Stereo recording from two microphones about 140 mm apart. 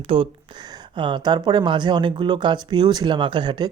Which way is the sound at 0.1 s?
40° right (ahead or behind).